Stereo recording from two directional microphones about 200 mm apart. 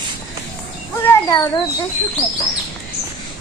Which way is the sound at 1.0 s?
15° left (ahead or behind).